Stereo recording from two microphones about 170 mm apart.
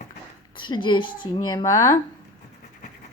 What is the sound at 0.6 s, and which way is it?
Speech, 25° left (ahead or behind).